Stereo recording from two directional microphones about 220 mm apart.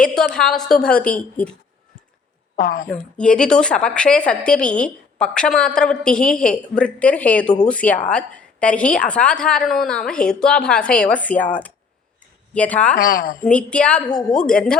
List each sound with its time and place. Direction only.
0.1 s a woman's voice: 5° left (ahead or behind)
2.6 s a woman's voice: 40° left (ahead or behind)
2.9 s a woman's voice: 5° left (ahead or behind)
12.5 s speech: 5° left (ahead or behind)
12.9 s a woman's voice: 40° left (ahead or behind)
13.4 s a woman's voice: 5° left (ahead or behind)